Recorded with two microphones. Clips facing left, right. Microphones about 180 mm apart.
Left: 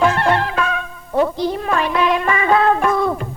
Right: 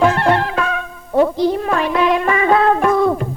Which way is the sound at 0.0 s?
40° right (ahead or behind).